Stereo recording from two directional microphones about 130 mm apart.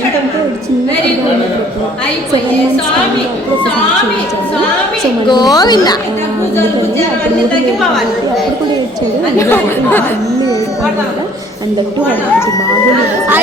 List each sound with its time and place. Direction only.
5.3 s speech: 30° left (ahead or behind)
9.4 s speech: 15° left (ahead or behind)